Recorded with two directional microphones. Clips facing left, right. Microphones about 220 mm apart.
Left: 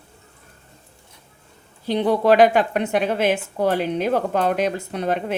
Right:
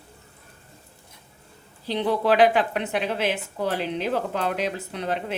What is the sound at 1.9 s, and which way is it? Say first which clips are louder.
A woman's voice: left 5 dB; 45° left (ahead or behind).